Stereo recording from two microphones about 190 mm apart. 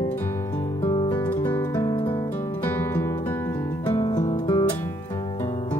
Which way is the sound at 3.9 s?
25° left (ahead or behind).